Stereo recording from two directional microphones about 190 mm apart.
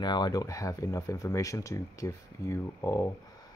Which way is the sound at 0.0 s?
20° left (ahead or behind).